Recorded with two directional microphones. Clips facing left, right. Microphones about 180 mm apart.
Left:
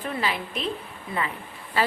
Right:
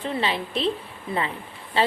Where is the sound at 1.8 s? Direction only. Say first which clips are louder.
Right 2 dB; 25° right (ahead or behind).